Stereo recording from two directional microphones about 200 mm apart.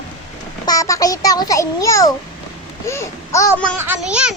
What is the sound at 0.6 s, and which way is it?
A child's voice, 15° left (ahead or behind).